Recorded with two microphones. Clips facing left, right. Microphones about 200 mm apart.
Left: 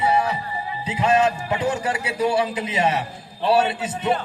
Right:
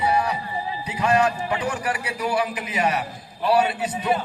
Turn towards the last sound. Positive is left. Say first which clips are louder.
# even
turn(degrees=25)  # may be behind; listen again after turning